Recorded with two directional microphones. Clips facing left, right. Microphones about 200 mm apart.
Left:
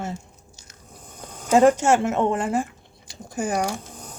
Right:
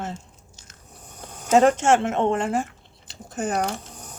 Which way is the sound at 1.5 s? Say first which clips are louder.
Left 1 dB; 10° left (ahead or behind).